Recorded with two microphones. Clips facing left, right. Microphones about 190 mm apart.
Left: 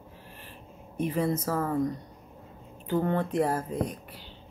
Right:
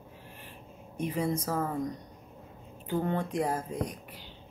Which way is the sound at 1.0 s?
15° right (ahead or behind).